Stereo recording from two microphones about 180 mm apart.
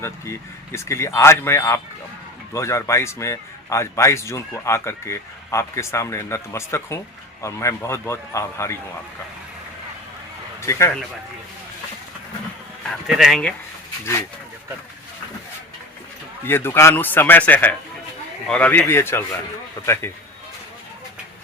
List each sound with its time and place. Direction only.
0.0 s a man's voice: 15° left (ahead or behind)
10.7 s a man's voice: 15° left (ahead or behind)
13.1 s speech: 5° right (ahead or behind)
14.0 s a man's voice: 15° left (ahead or behind)
16.4 s a man's voice: 10° left (ahead or behind)